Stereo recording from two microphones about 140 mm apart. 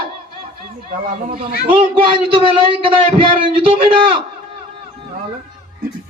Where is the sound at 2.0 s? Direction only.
40° right (ahead or behind).